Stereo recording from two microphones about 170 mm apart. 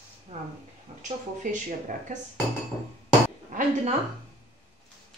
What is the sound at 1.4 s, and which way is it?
Speech, 50° right (ahead or behind).